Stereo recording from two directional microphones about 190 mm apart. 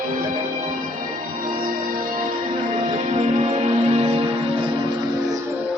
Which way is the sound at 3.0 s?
40° right (ahead or behind).